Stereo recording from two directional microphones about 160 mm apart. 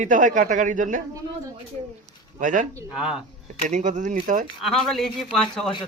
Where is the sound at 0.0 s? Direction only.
50° right (ahead or behind).